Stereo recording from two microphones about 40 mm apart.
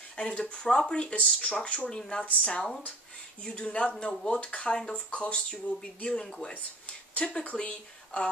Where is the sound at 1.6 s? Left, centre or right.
Left.